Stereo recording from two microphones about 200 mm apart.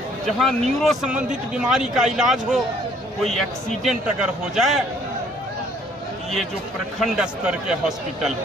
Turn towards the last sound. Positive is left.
turn(degrees=-5)  # may be behind; listen again after turning